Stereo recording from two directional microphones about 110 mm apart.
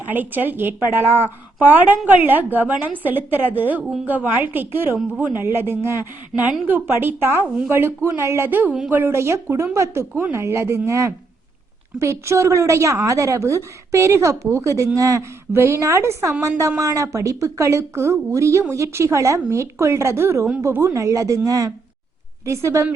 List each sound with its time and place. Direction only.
0.1 s a woman's voice: 15° right (ahead or behind)
1.0 s speech: 20° left (ahead or behind)
1.6 s a woman's voice: 15° right (ahead or behind)